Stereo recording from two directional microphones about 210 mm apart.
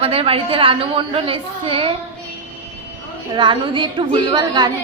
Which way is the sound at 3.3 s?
25° right (ahead or behind).